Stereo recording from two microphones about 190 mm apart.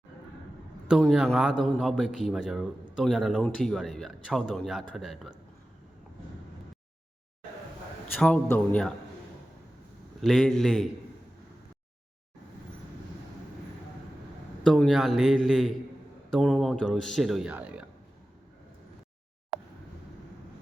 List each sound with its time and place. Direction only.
0.9 s a man's voice: centre (ahead or behind)
8.2 s a man's voice: 10° left (ahead or behind)
10.2 s a man's voice: centre (ahead or behind)
14.6 s a man's voice: centre (ahead or behind)
19.5 s a sound: 20° right (ahead or behind)